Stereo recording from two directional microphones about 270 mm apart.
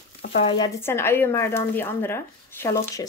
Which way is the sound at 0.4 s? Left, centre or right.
Centre.